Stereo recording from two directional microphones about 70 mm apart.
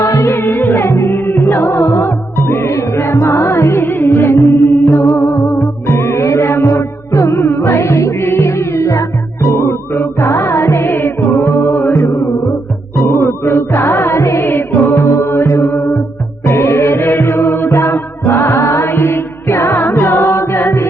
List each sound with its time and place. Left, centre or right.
0.0 s music: left